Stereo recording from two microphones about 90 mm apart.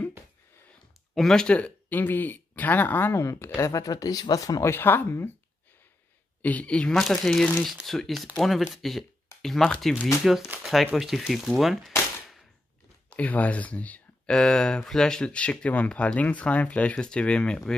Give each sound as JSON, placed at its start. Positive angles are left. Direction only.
{"t": 1.1, "sound": "speech", "side_deg": 5}
{"t": 4.6, "sound": "speech", "side_deg": 25}
{"t": 6.4, "sound": "speech", "side_deg": 15}
{"t": 6.9, "sound": "speech", "side_deg": 5}
{"t": 13.1, "sound": "speech", "side_deg": 15}